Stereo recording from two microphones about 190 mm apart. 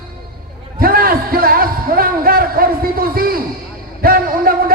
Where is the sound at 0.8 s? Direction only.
50° right (ahead or behind).